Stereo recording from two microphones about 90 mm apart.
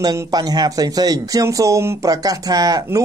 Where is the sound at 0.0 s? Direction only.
45° right (ahead or behind).